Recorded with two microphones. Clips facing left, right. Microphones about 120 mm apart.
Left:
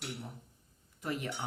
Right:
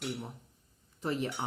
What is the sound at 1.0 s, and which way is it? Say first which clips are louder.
Speech: right 4 dB; 30° right (ahead or behind).